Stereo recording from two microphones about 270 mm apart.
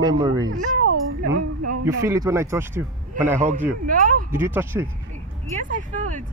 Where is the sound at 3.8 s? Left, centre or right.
Right.